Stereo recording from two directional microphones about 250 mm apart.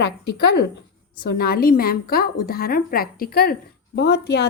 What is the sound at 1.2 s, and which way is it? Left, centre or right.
A woman's voice, left.